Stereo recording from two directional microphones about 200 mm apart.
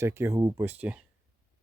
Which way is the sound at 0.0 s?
10° right (ahead or behind).